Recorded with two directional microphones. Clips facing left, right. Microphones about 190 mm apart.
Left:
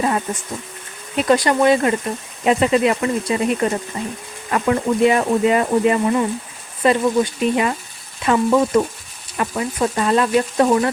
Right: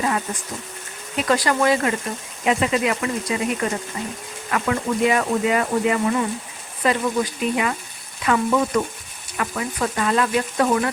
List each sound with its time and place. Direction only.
1.2 s speech: 20° left (ahead or behind)
2.4 s speech: 35° left (ahead or behind)